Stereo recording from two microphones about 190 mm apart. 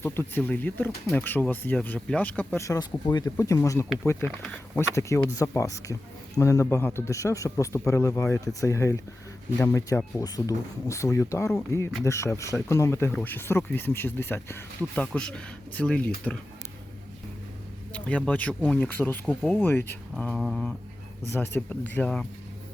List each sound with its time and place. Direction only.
0.0 s speech: 10° left (ahead or behind)
17.9 s speech: 5° left (ahead or behind)
19.4 s speech: 5° right (ahead or behind)
19.6 s speech: 10° left (ahead or behind)
21.2 s speech: 10° left (ahead or behind)